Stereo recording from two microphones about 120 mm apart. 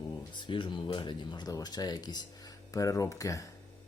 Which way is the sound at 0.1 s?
40° left (ahead or behind).